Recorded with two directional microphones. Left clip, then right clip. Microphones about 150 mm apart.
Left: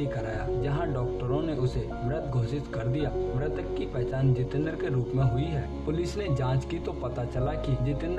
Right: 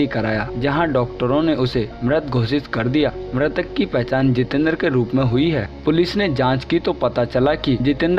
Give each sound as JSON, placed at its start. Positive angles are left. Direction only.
{"t": 0.1, "sound": "speech", "side_deg": -50}